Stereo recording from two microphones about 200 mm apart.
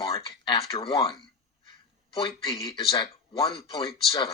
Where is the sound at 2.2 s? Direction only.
15° left (ahead or behind).